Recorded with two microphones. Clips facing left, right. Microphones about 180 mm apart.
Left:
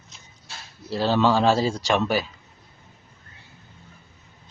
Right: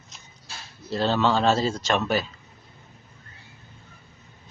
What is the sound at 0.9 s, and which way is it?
Speech, 15° left (ahead or behind).